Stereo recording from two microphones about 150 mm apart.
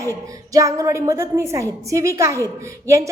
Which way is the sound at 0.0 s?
20° right (ahead or behind).